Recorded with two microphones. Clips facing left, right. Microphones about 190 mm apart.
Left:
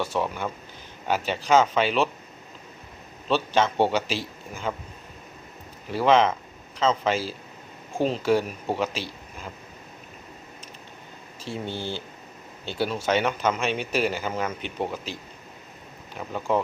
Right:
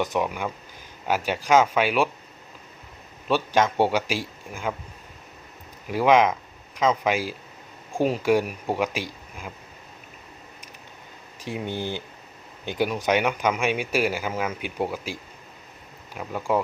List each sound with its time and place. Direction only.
0.0 s speech: 15° right (ahead or behind)
3.2 s speech: 10° right (ahead or behind)
5.9 s speech: 10° right (ahead or behind)
11.3 s speech: 15° right (ahead or behind)